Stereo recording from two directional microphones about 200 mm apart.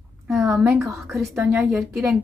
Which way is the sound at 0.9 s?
15° right (ahead or behind).